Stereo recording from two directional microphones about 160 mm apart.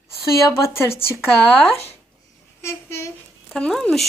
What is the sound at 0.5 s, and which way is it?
Speech, 15° left (ahead or behind).